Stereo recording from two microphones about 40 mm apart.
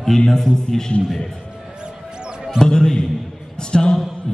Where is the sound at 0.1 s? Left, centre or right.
Centre.